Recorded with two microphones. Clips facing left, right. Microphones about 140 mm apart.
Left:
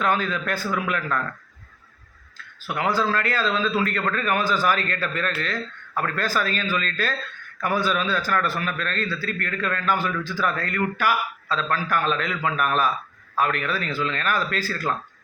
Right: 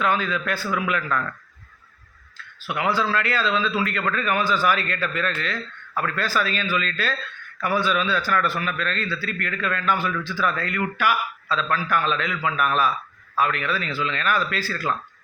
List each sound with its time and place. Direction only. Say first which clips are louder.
0.0 s speech: even; 45° left (ahead or behind)
2.6 s a man's voice: even; 40° left (ahead or behind)